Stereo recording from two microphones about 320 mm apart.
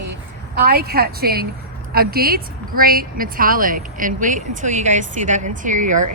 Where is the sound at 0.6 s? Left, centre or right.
Right.